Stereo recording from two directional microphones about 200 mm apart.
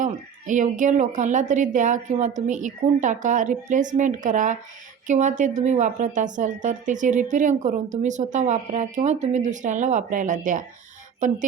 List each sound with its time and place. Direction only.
0.0 s a woman's voice: 40° right (ahead or behind)